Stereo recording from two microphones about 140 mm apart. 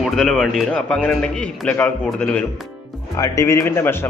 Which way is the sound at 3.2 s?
20° left (ahead or behind).